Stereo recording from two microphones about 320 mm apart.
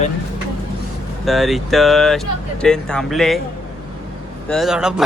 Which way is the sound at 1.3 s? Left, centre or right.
Centre.